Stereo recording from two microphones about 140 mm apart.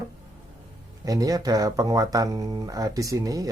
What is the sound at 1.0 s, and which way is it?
Speech, 25° right (ahead or behind).